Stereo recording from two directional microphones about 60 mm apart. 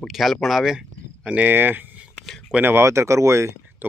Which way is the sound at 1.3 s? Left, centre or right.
Right.